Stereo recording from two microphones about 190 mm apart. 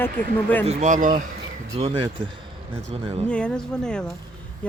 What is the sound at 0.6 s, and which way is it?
Speech, 35° right (ahead or behind).